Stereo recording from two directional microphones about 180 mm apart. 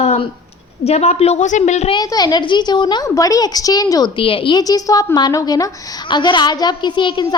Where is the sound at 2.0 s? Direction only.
20° left (ahead or behind).